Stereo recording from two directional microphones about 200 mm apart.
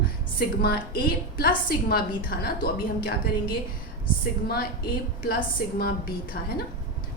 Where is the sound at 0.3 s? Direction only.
50° left (ahead or behind).